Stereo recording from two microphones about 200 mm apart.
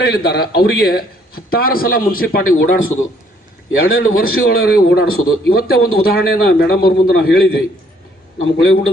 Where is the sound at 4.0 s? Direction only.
45° left (ahead or behind).